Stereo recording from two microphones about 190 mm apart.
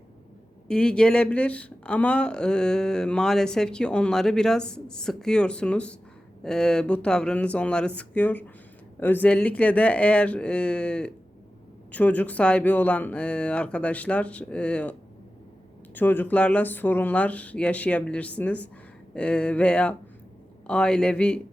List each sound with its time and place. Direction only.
0.7 s speech: 5° left (ahead or behind)
16.0 s speech: 10° left (ahead or behind)